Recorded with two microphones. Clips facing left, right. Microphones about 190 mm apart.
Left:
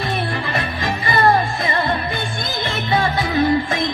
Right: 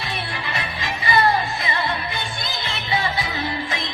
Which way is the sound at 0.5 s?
50° left (ahead or behind).